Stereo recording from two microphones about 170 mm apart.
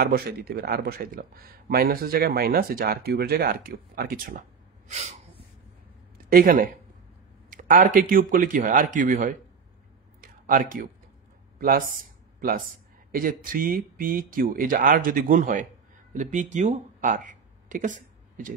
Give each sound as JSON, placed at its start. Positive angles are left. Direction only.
{"t": 0.0, "sound": "speech", "side_deg": -65}
{"t": 6.3, "sound": "speech", "side_deg": -60}
{"t": 10.2, "sound": "a sound", "side_deg": -55}
{"t": 12.4, "sound": "speech", "side_deg": -60}